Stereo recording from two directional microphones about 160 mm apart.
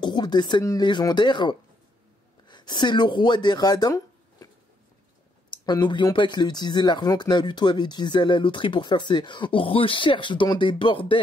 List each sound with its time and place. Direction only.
0.0 s speech: 30° left (ahead or behind)
5.5 s speech: 30° left (ahead or behind)